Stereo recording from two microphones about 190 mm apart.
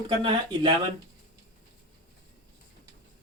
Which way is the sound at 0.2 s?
30° right (ahead or behind).